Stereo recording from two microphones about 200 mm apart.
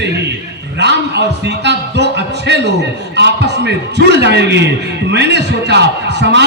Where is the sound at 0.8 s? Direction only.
60° right (ahead or behind).